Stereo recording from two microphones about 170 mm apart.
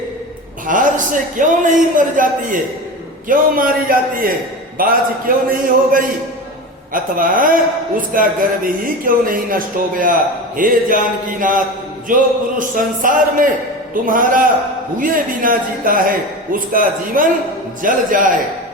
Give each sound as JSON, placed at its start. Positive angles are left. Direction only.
{"t": 0.7, "sound": "a man's voice", "side_deg": -50}